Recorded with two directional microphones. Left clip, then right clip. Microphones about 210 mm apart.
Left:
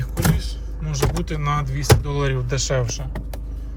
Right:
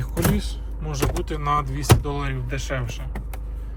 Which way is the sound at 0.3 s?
15° right (ahead or behind).